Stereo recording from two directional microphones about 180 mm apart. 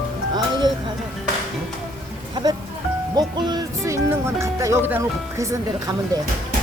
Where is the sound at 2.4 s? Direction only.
25° right (ahead or behind).